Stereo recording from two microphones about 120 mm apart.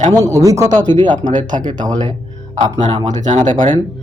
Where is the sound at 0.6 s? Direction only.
85° right.